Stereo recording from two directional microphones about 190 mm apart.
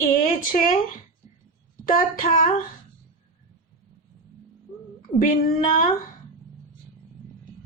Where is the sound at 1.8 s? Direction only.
45° left (ahead or behind).